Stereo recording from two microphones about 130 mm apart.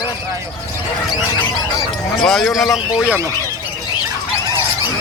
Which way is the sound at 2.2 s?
5° left (ahead or behind).